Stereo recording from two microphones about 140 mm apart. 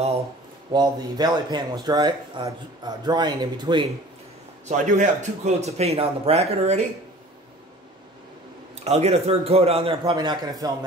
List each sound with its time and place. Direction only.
0.7 s speech: 30° right (ahead or behind)
4.6 s a man's voice: 60° right (ahead or behind)
8.7 s a man's voice: 50° right (ahead or behind)
10.1 s a man's voice: 30° right (ahead or behind)